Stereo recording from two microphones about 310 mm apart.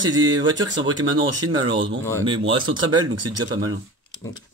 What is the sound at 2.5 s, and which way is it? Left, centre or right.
Speech, right.